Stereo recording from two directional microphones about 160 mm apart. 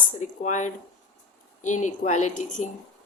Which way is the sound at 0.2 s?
50° left (ahead or behind).